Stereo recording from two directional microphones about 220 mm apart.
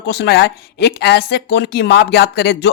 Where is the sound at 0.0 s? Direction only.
50° left (ahead or behind).